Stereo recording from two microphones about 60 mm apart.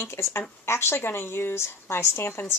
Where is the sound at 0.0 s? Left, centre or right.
Left.